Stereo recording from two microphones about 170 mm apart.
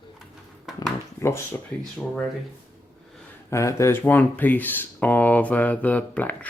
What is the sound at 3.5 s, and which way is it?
Speech, 15° left (ahead or behind).